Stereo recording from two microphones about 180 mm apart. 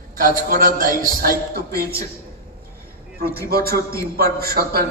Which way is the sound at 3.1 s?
60° right (ahead or behind).